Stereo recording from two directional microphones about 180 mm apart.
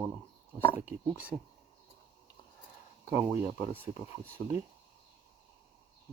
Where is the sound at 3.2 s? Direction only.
10° right (ahead or behind).